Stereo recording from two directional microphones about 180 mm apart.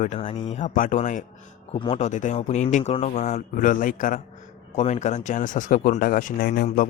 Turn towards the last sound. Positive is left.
turn(degrees=50)  # may be behind; listen again after turning